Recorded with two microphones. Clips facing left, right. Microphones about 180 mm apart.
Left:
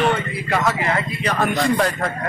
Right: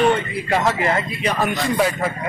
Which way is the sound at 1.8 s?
5° right (ahead or behind).